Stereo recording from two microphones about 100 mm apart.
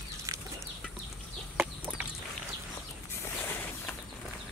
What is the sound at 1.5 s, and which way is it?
Chicken, 20° right (ahead or behind).